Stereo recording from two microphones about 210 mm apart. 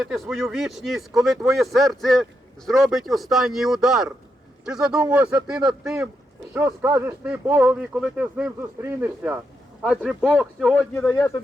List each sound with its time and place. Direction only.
0.0 s speech: centre (ahead or behind)